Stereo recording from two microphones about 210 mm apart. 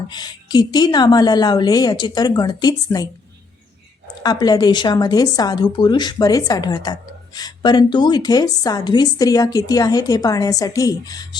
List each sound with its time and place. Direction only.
0.1 s a woman's voice: 20° left (ahead or behind)
4.2 s a woman's voice: 20° left (ahead or behind)